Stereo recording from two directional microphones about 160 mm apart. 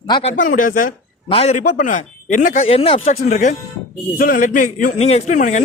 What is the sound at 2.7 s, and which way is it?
Speech, 35° left (ahead or behind).